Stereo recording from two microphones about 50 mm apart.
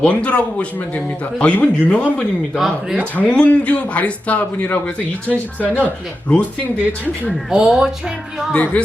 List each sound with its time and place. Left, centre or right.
0.0 s a man's voice: left
2.6 s speech: centre
3.3 s a man's voice: left
7.5 s speech: centre
8.5 s a man's voice: left